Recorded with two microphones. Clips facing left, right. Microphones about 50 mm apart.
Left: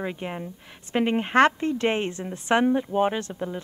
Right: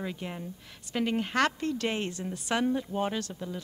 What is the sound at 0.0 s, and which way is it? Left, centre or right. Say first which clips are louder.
A woman's voice: left 5 dB; left.